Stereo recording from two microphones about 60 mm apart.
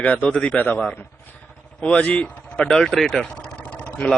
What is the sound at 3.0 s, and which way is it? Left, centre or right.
Vehicle, centre.